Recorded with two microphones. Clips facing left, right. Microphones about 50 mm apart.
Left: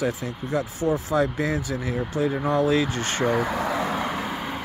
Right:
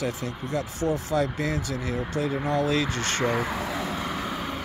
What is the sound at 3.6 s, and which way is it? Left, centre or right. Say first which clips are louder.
Speech: left 5 dB; left.